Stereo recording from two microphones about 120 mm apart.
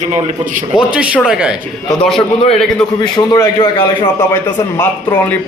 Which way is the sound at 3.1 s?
35° left (ahead or behind).